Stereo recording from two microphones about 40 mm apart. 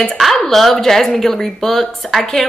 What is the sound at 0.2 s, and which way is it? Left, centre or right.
A woman's voice, centre.